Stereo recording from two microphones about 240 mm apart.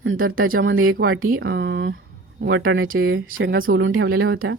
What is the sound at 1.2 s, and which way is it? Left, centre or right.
Speech, right.